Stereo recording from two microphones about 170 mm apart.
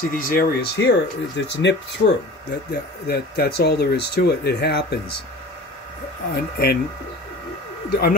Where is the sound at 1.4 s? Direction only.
90° left.